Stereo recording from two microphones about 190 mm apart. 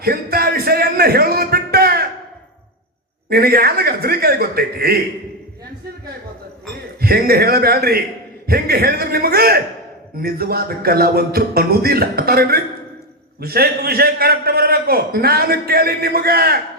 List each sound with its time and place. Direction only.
0.0 s music: 55° right (ahead or behind)
3.2 s a man's voice: 55° right (ahead or behind)
7.0 s a man's voice: 55° right (ahead or behind)